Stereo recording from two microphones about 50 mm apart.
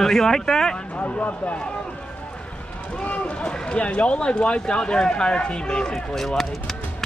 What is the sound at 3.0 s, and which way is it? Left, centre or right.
Speech, left.